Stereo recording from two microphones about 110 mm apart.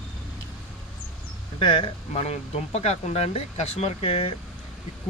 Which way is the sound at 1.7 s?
50° left (ahead or behind).